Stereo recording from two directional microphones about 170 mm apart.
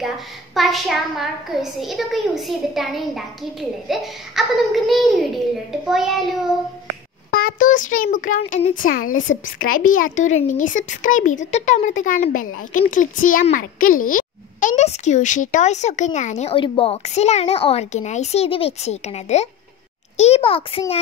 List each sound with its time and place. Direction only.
0.6 s a child's voice: centre (ahead or behind)
7.2 s a child's voice: 60° left (ahead or behind); by 20.8 s 35° left (ahead or behind)